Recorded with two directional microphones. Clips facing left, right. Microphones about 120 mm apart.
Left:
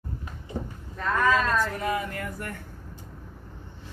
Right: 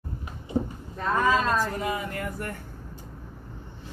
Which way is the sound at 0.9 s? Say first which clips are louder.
Even; 25° right (ahead or behind).